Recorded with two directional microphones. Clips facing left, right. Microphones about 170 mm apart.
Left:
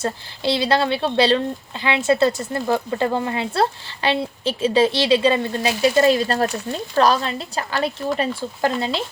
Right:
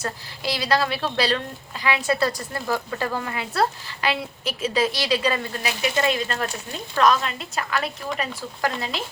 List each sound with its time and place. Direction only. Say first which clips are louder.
0.0 s speech: left 6 dB; 25° left (ahead or behind)